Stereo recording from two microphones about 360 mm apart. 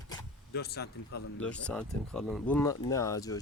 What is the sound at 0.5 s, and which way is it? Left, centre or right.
Speech, left.